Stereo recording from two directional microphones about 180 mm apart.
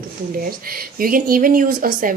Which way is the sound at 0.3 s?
55° right (ahead or behind).